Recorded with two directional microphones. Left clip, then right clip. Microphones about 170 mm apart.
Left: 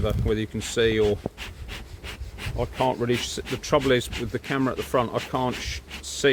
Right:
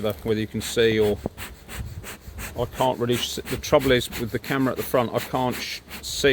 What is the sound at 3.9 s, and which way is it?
Speech, 15° right (ahead or behind).